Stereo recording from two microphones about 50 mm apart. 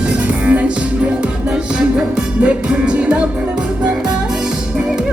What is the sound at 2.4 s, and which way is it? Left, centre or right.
Music, right.